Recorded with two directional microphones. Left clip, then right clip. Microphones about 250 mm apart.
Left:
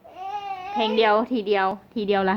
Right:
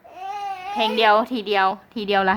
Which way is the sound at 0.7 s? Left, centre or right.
Centre.